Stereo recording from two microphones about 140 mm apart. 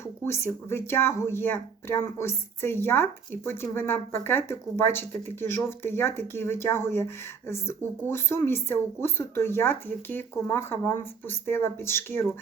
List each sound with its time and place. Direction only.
0.3 s speech: 15° left (ahead or behind)